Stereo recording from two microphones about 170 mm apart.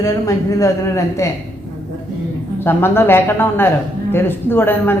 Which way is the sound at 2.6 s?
15° left (ahead or behind).